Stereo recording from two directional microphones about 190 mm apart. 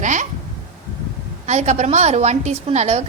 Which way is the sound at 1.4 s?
35° right (ahead or behind).